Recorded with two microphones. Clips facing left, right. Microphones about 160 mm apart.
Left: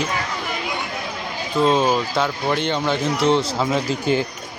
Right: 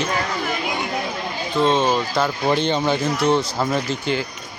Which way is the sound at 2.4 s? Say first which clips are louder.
Right 2 dB; 15° right (ahead or behind).